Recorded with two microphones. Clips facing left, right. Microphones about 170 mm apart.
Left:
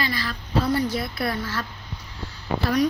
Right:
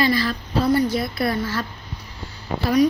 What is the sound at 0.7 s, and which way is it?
Speech, centre (ahead or behind).